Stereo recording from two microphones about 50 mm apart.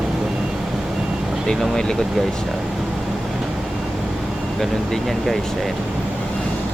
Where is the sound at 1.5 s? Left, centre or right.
Centre.